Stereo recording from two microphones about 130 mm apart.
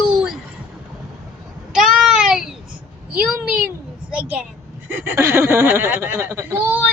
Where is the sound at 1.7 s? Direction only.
5° right (ahead or behind).